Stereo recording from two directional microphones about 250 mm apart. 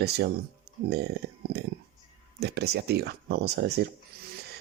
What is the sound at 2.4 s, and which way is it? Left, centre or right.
Speech, right.